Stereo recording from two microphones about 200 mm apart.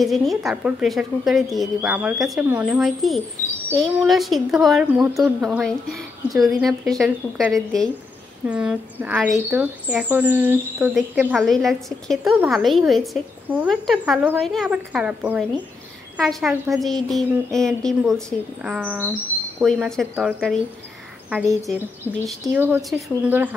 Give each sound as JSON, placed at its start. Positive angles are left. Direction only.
{"t": 0.0, "sound": "speech", "side_deg": 0}
{"t": 19.6, "sound": "a woman's voice", "side_deg": 0}